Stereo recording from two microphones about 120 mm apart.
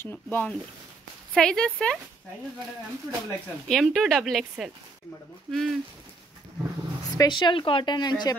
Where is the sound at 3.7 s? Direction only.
5° left (ahead or behind).